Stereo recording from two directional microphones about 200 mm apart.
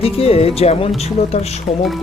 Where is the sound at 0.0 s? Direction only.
30° left (ahead or behind).